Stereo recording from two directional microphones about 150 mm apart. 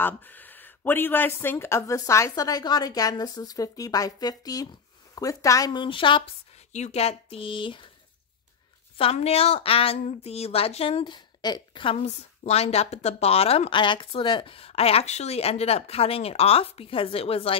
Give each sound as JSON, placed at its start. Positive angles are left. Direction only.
{"t": 0.0, "sound": "speech", "side_deg": 10}
{"t": 6.7, "sound": "a woman's voice", "side_deg": 50}
{"t": 8.9, "sound": "a woman's voice", "side_deg": 40}